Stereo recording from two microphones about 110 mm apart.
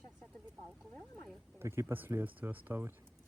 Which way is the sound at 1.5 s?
25° right (ahead or behind).